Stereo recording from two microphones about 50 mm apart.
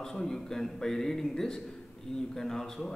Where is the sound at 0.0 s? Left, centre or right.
Centre.